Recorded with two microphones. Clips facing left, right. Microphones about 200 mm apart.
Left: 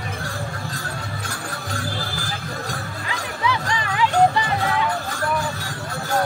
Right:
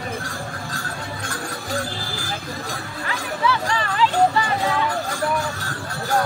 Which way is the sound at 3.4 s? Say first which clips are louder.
Right 2 dB; 15° left (ahead or behind).